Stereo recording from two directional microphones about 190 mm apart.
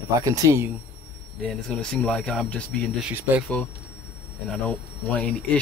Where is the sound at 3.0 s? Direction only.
5° right (ahead or behind).